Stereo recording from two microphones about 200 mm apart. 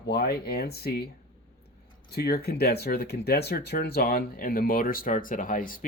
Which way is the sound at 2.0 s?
50° left (ahead or behind).